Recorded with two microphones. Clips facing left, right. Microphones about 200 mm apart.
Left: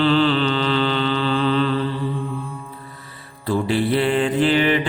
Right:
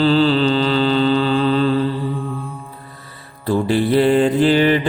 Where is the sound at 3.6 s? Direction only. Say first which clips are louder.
Right 6 dB; 45° right (ahead or behind).